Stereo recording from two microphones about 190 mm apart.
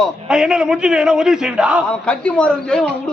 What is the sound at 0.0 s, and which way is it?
A man's voice, 5° right (ahead or behind).